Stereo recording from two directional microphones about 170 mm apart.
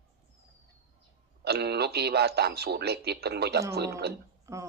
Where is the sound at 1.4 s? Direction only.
75° right (ahead or behind).